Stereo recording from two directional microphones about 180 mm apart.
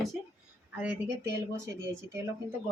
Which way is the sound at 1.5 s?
15° right (ahead or behind).